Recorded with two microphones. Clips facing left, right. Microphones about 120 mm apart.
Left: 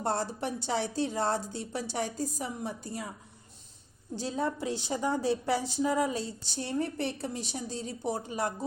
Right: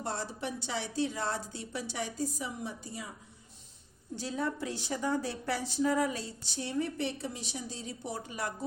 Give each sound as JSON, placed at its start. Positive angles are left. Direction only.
{"t": 0.0, "sound": "a woman's voice", "side_deg": 45}
{"t": 4.2, "sound": "a woman's voice", "side_deg": 25}
{"t": 6.6, "sound": "a woman's voice", "side_deg": 40}